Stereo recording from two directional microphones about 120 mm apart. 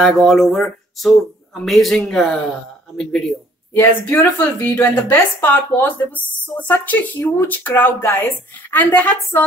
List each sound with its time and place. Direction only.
0.0 s speech: 5° left (ahead or behind)
3.7 s a woman's voice: 15° left (ahead or behind)